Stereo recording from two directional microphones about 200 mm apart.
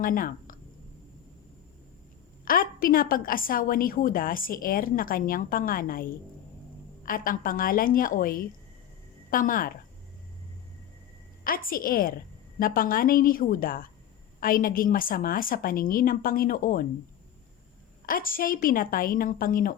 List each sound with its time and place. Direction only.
0.0 s speech: 45° left (ahead or behind)
2.4 s a woman's voice: 45° left (ahead or behind)
11.4 s a woman's voice: 45° left (ahead or behind)
18.0 s a woman's voice: 45° left (ahead or behind)